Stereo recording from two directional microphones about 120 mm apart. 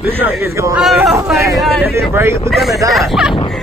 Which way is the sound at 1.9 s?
20° right (ahead or behind).